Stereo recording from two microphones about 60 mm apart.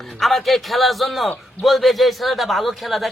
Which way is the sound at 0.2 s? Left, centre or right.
Centre.